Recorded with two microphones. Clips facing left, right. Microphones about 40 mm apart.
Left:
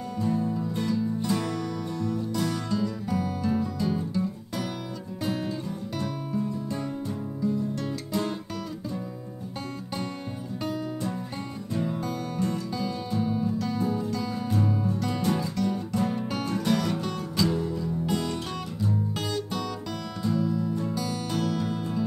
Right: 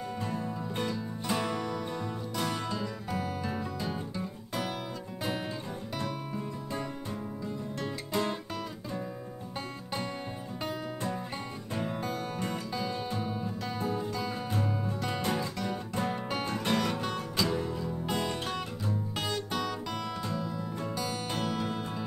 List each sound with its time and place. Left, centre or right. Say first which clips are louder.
0.3 s music: left 7 dB; centre
10.6 s music: left 4 dB; centre
11.7 s music: left 4 dB; right